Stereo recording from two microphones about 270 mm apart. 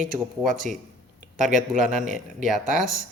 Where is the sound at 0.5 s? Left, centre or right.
Right.